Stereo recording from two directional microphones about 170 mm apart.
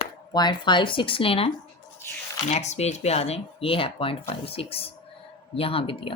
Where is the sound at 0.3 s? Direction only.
25° left (ahead or behind).